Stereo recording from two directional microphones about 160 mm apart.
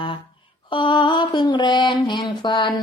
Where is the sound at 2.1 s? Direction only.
30° left (ahead or behind).